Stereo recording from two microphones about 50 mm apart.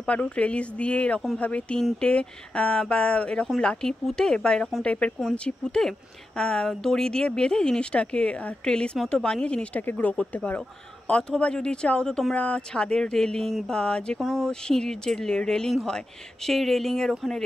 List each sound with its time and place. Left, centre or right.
0.0 s speech: left
9.8 s speech: left; by 15.7 s centre
16.4 s speech: centre